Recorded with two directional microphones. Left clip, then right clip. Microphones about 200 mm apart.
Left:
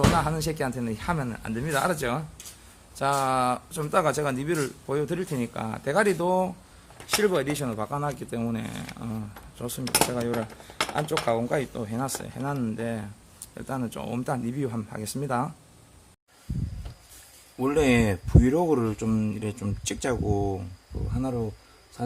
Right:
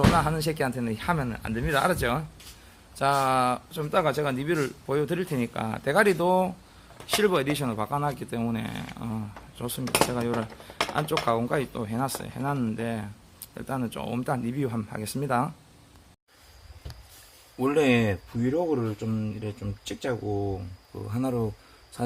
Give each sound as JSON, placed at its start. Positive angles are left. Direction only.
{"t": 0.1, "sound": "speech", "side_deg": 0}
{"t": 3.7, "sound": "speech", "side_deg": 10}
{"t": 17.6, "sound": "speech", "side_deg": 0}
{"t": 18.4, "sound": "speech", "side_deg": 25}
{"t": 21.1, "sound": "speech", "side_deg": -10}